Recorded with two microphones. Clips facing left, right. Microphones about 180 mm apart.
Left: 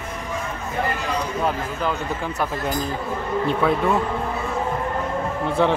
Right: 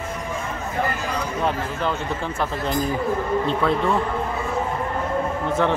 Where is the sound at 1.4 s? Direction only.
5° left (ahead or behind).